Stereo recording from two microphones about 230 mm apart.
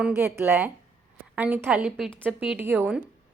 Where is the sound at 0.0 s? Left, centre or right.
Centre.